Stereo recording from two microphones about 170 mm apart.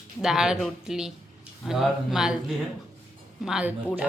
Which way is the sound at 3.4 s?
5° right (ahead or behind).